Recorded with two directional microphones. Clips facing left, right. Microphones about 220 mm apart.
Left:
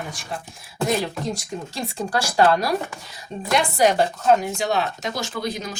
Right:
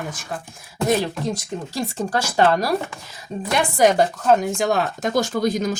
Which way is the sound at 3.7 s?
45° right (ahead or behind).